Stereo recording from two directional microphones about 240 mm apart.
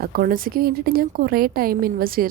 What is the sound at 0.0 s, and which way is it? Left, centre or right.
A woman's voice, right.